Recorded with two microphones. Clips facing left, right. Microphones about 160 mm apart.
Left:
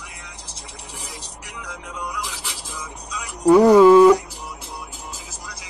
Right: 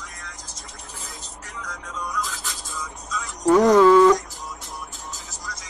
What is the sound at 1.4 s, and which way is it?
Music, 10° left (ahead or behind).